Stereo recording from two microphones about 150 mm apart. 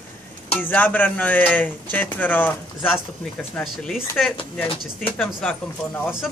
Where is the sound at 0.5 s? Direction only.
10° left (ahead or behind).